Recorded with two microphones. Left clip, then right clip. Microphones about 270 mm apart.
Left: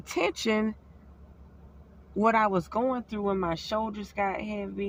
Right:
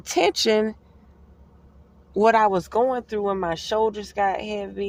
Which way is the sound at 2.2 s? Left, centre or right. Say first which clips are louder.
Right 7 dB; right.